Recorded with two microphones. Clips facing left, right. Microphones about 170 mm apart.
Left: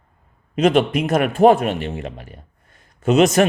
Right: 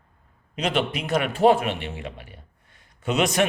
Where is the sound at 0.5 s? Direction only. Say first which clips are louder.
Left 9 dB; 45° left (ahead or behind).